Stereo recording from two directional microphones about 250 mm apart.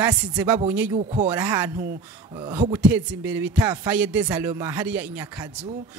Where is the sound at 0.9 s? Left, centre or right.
Right.